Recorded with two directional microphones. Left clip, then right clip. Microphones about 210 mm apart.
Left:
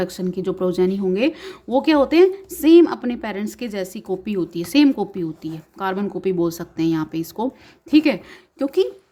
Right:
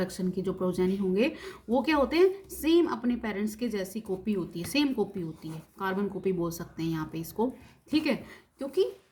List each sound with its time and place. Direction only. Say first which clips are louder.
0.0 s speech: left 8 dB; 40° left (ahead or behind)